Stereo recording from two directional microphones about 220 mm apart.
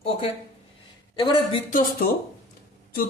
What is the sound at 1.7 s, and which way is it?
Speech, 35° left (ahead or behind).